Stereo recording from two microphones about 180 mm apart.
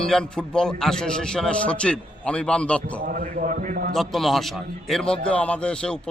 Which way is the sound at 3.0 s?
50° right (ahead or behind).